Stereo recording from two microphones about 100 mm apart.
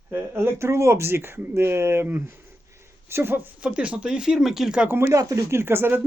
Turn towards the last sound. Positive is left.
turn(degrees=-20)  # may be behind; listen again after turning